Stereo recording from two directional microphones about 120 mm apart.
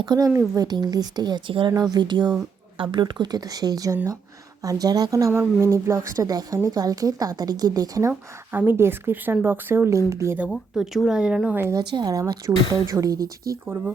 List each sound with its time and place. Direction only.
0.0 s speech: 35° right (ahead or behind)
8.5 s speech: 20° right (ahead or behind)
10.5 s speech: centre (ahead or behind)
11.7 s speech: 35° right (ahead or behind)